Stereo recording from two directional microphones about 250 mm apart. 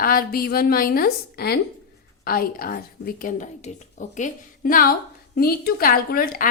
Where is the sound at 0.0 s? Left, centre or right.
Left.